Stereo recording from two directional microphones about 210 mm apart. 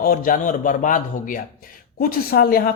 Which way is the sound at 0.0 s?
40° left (ahead or behind).